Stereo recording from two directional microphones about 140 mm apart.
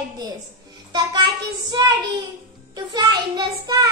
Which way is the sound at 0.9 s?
30° right (ahead or behind).